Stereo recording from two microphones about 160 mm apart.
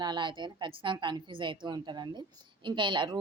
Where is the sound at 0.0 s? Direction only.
30° right (ahead or behind).